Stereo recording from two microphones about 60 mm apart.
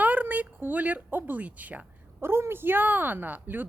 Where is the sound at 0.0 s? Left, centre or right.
Right.